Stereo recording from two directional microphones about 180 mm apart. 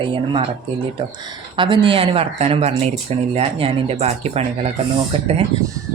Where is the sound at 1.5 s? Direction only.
25° right (ahead or behind).